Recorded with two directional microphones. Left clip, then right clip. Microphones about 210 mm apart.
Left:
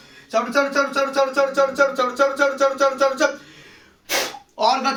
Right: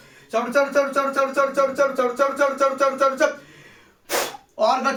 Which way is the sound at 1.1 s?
5° right (ahead or behind).